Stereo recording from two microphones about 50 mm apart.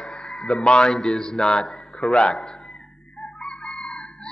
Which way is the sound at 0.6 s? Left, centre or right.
Centre.